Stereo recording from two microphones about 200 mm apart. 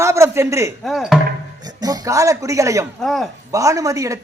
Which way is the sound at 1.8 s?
15° right (ahead or behind).